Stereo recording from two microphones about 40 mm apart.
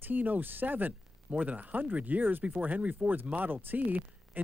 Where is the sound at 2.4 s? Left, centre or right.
Right.